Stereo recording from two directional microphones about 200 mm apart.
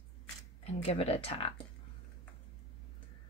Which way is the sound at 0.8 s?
30° left (ahead or behind).